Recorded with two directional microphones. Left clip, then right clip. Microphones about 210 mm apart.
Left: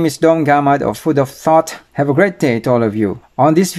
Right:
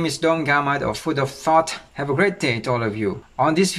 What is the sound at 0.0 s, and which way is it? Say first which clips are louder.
Speech: left 8 dB; 35° left (ahead or behind).